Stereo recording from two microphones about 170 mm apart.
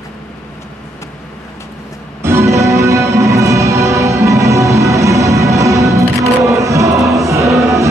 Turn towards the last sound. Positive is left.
turn(degrees=-20)  # may be behind; listen again after turning